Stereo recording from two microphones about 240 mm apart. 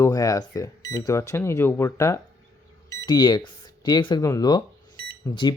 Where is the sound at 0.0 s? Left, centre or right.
Centre.